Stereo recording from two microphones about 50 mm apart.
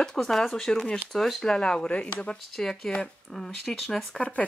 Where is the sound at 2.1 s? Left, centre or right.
Centre.